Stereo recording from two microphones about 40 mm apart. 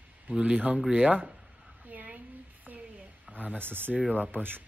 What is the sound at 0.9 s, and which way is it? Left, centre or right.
Speech, right.